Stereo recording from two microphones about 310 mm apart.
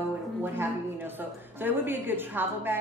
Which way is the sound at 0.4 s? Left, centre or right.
Centre.